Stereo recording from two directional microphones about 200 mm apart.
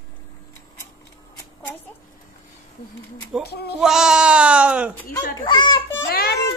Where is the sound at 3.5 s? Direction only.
50° left (ahead or behind).